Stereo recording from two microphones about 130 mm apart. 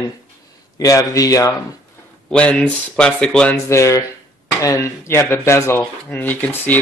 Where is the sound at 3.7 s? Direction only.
25° left (ahead or behind).